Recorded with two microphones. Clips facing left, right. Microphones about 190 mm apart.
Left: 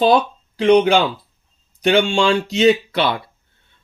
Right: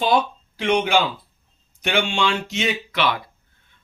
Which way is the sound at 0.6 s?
35° left (ahead or behind).